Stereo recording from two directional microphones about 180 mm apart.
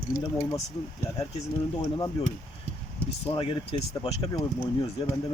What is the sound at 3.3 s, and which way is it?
Speech, 30° left (ahead or behind).